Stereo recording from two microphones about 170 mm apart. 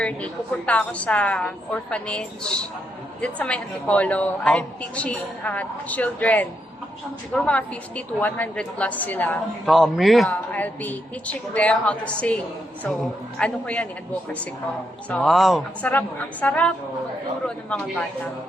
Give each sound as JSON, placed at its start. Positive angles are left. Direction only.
{"t": 0.0, "sound": "a woman's voice", "side_deg": 5}
{"t": 9.6, "sound": "a woman's voice", "side_deg": 0}
{"t": 13.4, "sound": "a woman's voice", "side_deg": 10}
{"t": 15.1, "sound": "a woman's voice", "side_deg": 0}